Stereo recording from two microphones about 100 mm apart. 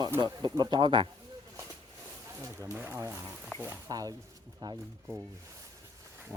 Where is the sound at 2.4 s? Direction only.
30° right (ahead or behind).